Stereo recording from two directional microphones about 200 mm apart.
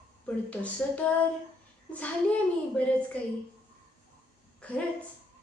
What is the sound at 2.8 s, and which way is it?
Speech, 5° left (ahead or behind).